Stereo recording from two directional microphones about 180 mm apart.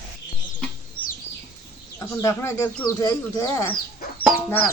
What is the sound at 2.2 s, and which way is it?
Speech, 15° left (ahead or behind).